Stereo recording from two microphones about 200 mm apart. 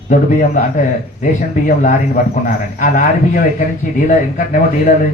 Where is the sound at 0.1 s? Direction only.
40° left (ahead or behind).